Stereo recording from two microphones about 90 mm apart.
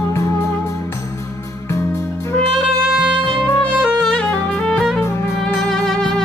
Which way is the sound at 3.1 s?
10° left (ahead or behind).